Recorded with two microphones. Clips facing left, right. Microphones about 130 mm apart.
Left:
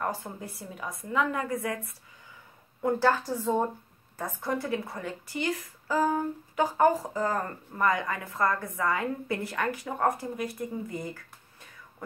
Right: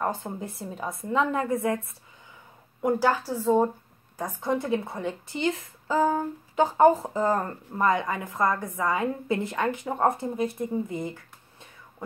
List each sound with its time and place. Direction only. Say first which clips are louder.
0.0 s a woman's voice: right 3 dB; 20° right (ahead or behind)
2.8 s a woman's voice: right 1 dB; 10° right (ahead or behind)